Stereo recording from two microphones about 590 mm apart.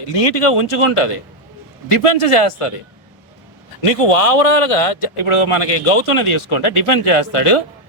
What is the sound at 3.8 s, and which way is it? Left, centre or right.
Speech, left.